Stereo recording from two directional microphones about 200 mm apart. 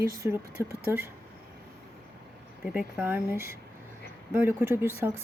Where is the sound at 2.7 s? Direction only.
10° right (ahead or behind).